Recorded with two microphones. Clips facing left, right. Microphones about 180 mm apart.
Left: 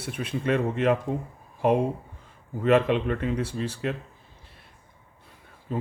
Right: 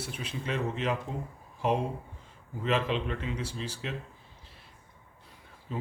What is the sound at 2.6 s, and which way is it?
Speech, 55° left (ahead or behind).